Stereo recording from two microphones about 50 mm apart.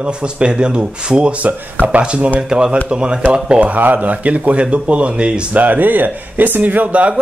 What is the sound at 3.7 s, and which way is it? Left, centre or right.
Speech, right.